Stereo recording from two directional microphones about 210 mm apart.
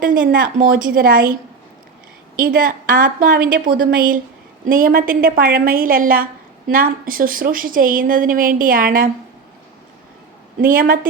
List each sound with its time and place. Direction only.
0.0 s a woman's voice: 40° right (ahead or behind)
10.6 s a woman's voice: 45° right (ahead or behind)